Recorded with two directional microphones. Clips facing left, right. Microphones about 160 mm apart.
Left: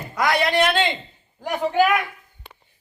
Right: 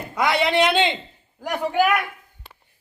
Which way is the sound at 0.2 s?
20° right (ahead or behind).